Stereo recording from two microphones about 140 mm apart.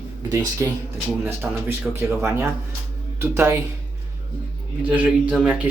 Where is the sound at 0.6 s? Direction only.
20° right (ahead or behind).